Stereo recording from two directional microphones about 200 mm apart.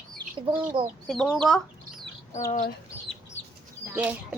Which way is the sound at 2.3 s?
15° left (ahead or behind).